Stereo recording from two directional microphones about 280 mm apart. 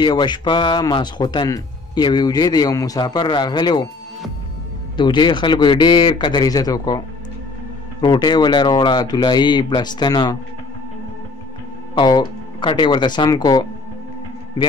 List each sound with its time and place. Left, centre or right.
0.0 s speech: centre
4.9 s speech: centre
8.0 s speech: centre
11.9 s speech: centre